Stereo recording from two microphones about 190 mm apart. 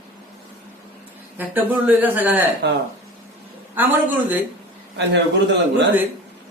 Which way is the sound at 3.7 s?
10° right (ahead or behind).